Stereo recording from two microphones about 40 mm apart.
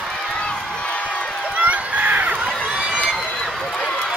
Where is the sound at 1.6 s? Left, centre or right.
Right.